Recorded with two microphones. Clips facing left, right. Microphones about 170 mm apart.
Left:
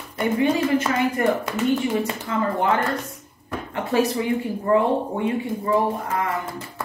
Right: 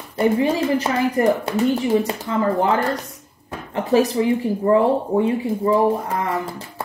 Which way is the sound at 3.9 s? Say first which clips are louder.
Right 4 dB; 35° right (ahead or behind).